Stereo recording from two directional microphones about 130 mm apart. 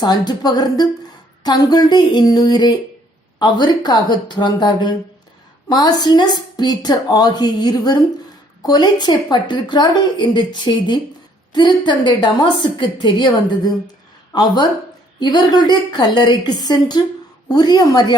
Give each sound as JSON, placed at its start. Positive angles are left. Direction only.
{"t": 0.0, "sound": "a woman's voice", "side_deg": 30}
{"t": 14.3, "sound": "a woman's voice", "side_deg": 30}